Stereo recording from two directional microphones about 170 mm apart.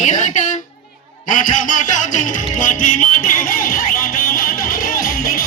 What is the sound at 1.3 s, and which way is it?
Music, 50° left (ahead or behind).